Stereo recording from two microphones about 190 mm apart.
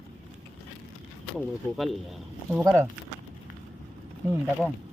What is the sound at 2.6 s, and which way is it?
Speech, 15° right (ahead or behind).